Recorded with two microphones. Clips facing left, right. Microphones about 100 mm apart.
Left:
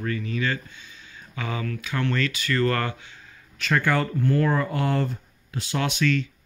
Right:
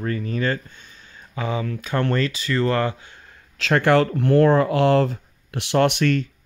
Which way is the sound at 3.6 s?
75° right (ahead or behind).